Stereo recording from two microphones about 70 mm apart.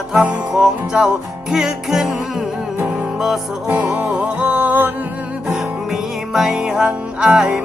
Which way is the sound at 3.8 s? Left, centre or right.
Centre.